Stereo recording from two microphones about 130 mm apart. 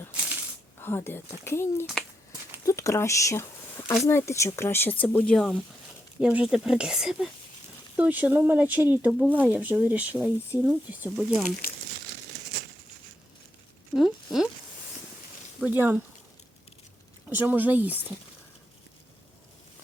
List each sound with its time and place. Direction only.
0.8 s speech: 15° left (ahead or behind)
6.1 s speech: 5° right (ahead or behind)
11.2 s speech: centre (ahead or behind)
13.9 s speech: 5° right (ahead or behind)
15.6 s speech: 15° right (ahead or behind)
17.2 s speech: 15° right (ahead or behind)